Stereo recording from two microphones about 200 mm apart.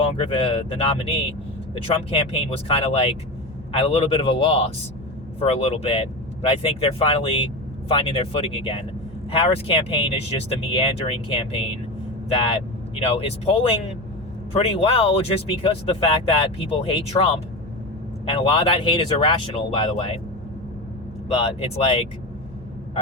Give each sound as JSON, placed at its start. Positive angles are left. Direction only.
{"t": 0.0, "sound": "speech", "side_deg": 25}
{"t": 21.3, "sound": "speech", "side_deg": 30}